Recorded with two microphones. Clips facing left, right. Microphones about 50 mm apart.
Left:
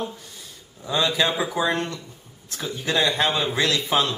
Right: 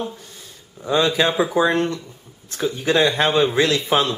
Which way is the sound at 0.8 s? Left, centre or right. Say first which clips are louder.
Right 4 dB; centre.